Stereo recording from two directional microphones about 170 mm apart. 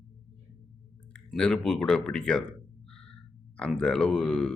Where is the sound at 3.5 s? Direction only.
5° left (ahead or behind).